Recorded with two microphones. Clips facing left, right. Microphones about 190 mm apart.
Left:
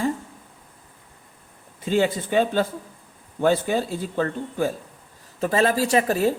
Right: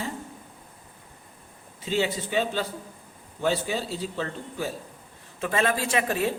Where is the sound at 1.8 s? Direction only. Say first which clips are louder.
Left 5 dB; 50° left (ahead or behind).